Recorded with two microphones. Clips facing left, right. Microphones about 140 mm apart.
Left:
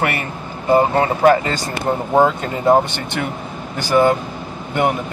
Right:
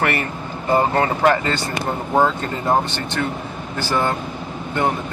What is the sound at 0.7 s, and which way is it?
Speech, 15° left (ahead or behind).